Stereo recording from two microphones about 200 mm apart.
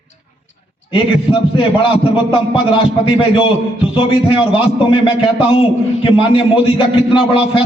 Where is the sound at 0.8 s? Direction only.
25° left (ahead or behind).